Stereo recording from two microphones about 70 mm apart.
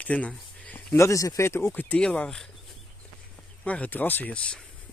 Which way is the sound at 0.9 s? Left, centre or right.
Left.